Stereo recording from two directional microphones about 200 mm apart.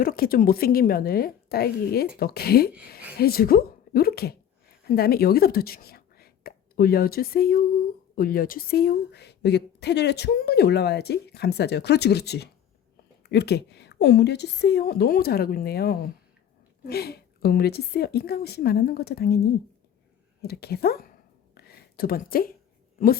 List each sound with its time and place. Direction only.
0.0 s a woman's voice: 45° left (ahead or behind)
20.4 s a woman's voice: 55° left (ahead or behind)
21.5 s a sound: 50° left (ahead or behind)